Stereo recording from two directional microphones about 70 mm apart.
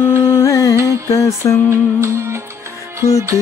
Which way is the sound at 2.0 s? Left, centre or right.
Right.